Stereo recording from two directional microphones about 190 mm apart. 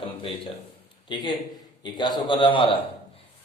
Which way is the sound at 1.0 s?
25° left (ahead or behind).